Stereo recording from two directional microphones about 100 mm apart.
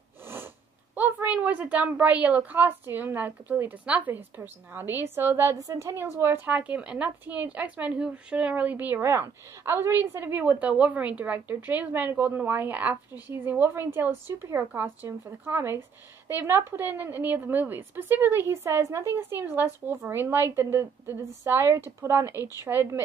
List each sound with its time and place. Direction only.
0.9 s a woman's voice: 15° right (ahead or behind)